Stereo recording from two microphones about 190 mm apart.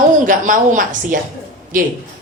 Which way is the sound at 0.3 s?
45° right (ahead or behind).